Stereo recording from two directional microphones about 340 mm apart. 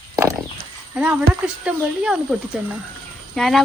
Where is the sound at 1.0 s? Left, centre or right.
Centre.